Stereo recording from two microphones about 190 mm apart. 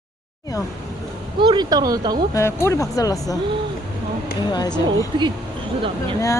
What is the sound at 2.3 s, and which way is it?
Speech, 15° left (ahead or behind).